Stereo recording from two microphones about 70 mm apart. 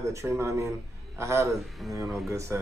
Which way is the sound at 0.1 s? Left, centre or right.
Right.